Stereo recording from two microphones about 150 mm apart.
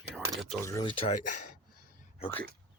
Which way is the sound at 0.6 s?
20° left (ahead or behind).